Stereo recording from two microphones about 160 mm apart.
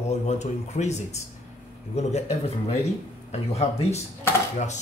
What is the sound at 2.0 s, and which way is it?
Speech, 45° left (ahead or behind).